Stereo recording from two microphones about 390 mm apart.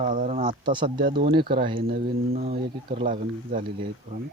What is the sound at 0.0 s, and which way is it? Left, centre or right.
Speech, centre.